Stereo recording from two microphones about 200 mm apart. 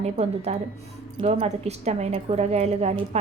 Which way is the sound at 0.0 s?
30° right (ahead or behind).